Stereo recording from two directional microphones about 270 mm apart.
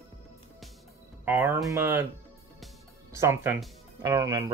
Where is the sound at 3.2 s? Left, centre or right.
Centre.